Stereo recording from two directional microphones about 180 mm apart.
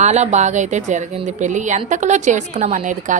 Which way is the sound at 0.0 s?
40° right (ahead or behind).